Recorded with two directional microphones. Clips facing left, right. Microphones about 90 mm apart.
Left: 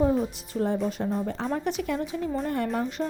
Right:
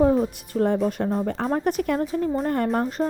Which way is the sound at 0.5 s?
50° right (ahead or behind).